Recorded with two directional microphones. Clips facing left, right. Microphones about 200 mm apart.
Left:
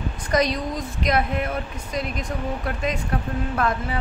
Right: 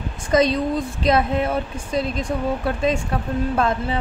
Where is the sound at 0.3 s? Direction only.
25° right (ahead or behind).